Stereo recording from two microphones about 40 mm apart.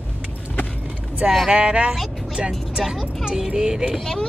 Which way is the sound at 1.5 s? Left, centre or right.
Right.